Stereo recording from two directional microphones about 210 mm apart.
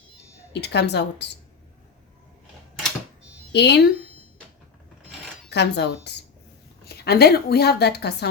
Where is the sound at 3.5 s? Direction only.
55° left (ahead or behind).